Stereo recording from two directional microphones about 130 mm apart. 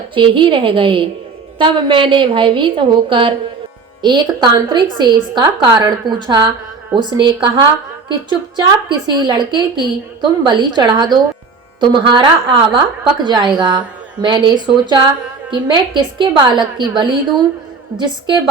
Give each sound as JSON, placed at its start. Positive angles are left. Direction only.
{"t": 0.1, "sound": "a woman's voice", "side_deg": -40}